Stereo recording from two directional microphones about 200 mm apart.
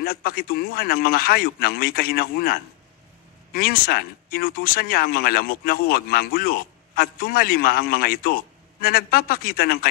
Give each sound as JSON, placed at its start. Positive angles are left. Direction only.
{"t": 0.0, "sound": "speech", "side_deg": 50}